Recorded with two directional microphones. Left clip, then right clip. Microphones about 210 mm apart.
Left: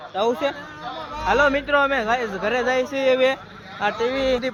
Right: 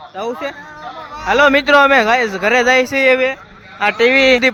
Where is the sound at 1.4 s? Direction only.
30° right (ahead or behind).